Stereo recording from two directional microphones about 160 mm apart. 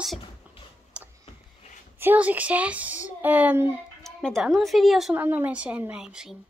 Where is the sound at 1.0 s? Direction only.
5° right (ahead or behind).